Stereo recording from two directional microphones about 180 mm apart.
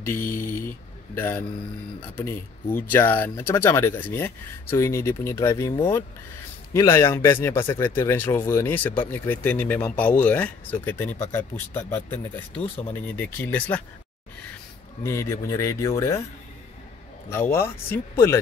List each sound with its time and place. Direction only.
0.0 s speech: 10° left (ahead or behind)
2.7 s speech: 10° left (ahead or behind)
13.4 s speech: 10° left (ahead or behind)
15.0 s speech: 15° left (ahead or behind)
17.3 s speech: 15° left (ahead or behind)